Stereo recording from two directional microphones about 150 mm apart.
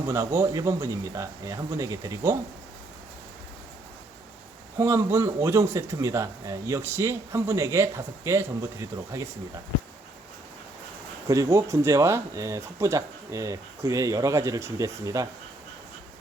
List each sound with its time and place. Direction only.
0.1 s speech: 20° right (ahead or behind)
4.8 s speech: 15° right (ahead or behind)
11.3 s speech: 20° right (ahead or behind)